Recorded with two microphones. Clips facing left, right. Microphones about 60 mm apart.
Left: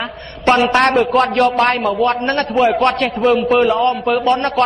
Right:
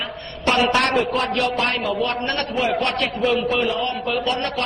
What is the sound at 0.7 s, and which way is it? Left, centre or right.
Speech, left.